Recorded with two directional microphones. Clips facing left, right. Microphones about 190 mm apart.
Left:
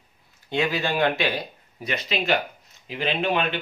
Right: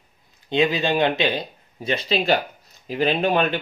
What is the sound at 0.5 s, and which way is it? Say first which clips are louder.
Speech: right 4 dB; 20° right (ahead or behind).